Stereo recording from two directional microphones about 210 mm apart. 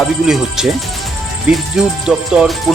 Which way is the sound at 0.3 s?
Centre (ahead or behind).